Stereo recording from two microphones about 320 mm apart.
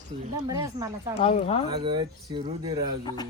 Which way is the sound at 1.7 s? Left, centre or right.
Centre.